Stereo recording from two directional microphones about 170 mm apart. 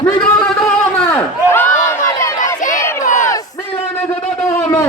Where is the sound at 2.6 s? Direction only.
50° left (ahead or behind).